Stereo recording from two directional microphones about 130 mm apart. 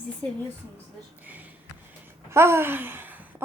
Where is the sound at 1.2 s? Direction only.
15° right (ahead or behind).